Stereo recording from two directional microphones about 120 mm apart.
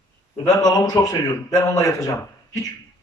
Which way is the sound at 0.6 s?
30° left (ahead or behind).